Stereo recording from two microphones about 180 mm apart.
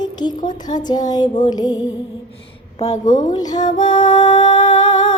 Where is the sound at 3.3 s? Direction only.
20° left (ahead or behind).